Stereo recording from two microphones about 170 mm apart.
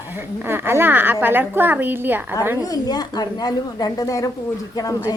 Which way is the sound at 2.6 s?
20° left (ahead or behind).